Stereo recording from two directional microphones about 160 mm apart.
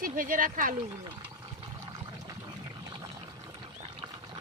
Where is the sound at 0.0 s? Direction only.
60° right (ahead or behind).